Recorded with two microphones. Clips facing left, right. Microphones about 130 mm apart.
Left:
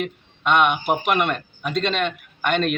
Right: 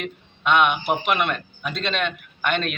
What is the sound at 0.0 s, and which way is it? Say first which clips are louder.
Speech: left 2 dB; centre (ahead or behind).